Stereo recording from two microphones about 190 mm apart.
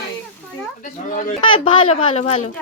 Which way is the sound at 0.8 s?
45° left (ahead or behind).